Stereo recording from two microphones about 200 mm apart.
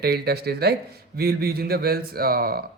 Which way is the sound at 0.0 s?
55° right (ahead or behind).